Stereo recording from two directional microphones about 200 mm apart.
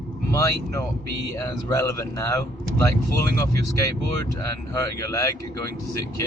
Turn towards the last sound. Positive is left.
turn(degrees=15)  # may be behind; listen again after turning